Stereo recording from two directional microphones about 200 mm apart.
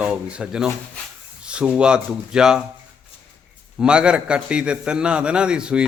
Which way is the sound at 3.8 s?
5° right (ahead or behind).